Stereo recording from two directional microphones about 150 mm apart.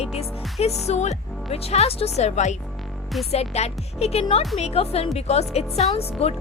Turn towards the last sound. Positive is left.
turn(degrees=40)  # may be behind; listen again after turning